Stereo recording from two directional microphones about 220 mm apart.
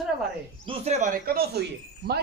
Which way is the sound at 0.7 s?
30° right (ahead or behind).